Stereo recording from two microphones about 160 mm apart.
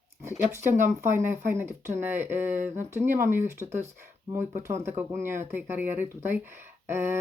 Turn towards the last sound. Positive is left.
turn(degrees=-15)  # may be behind; listen again after turning